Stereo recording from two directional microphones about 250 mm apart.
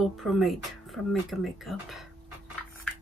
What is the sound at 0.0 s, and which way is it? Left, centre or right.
Speech, centre.